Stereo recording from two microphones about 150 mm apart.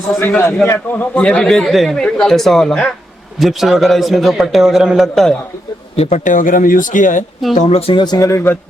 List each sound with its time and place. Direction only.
0.2 s a man's voice: 15° left (ahead or behind)
6.0 s speech: 50° left (ahead or behind)
7.5 s speech: 45° left (ahead or behind)
8.0 s a man's voice: 25° left (ahead or behind)